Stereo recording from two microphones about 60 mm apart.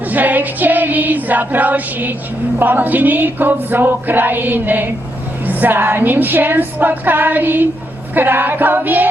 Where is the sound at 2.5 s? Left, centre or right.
Right.